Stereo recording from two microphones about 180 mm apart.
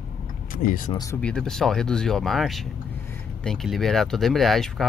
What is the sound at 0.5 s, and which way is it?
Speech, 50° left (ahead or behind).